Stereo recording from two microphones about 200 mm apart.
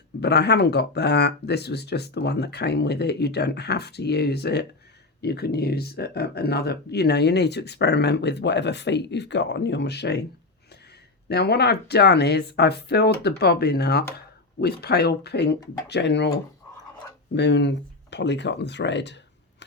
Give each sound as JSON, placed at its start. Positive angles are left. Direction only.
{"t": 0.2, "sound": "speech", "side_deg": 55}
{"t": 11.3, "sound": "speech", "side_deg": 55}
{"t": 17.3, "sound": "speech", "side_deg": 60}